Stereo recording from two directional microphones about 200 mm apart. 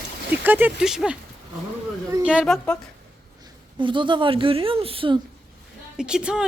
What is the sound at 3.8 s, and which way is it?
Speech, 25° right (ahead or behind).